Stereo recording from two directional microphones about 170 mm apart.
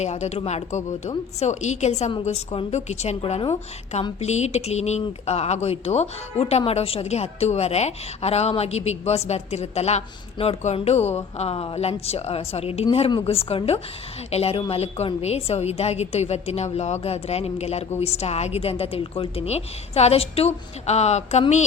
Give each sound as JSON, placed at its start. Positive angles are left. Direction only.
{"t": 0.0, "sound": "speech", "side_deg": 40}